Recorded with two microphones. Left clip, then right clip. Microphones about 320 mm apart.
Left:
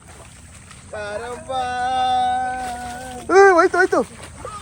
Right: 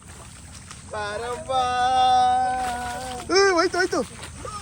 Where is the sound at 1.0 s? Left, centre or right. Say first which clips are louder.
Left 1 dB; centre.